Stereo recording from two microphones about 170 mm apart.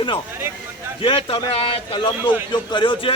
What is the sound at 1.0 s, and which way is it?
A man's voice, 35° left (ahead or behind).